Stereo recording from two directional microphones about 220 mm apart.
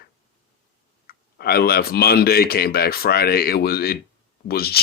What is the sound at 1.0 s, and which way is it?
Speech, 45° left (ahead or behind).